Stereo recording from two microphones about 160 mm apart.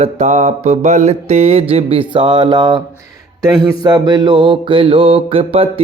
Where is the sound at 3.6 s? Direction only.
25° right (ahead or behind).